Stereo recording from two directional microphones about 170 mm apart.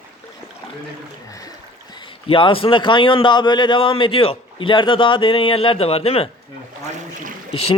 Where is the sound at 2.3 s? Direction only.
30° left (ahead or behind).